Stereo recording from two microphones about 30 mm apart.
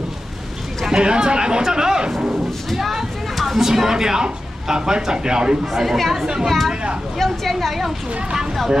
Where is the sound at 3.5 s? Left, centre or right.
Centre.